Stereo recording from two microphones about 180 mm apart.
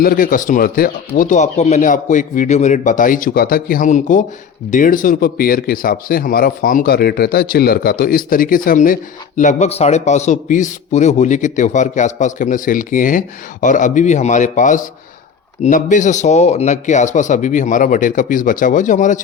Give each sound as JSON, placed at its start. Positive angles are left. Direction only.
{"t": 0.0, "sound": "speech", "side_deg": 50}